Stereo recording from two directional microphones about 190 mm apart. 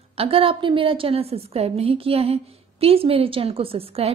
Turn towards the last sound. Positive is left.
turn(degrees=-30)  # may be behind; listen again after turning